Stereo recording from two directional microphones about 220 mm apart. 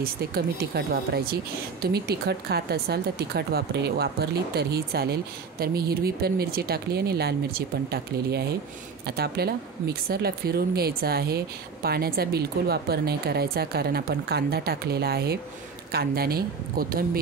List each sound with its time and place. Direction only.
0.0 s speech: 45° right (ahead or behind)